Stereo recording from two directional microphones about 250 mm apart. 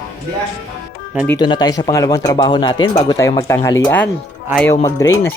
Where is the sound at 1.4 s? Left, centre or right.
Centre.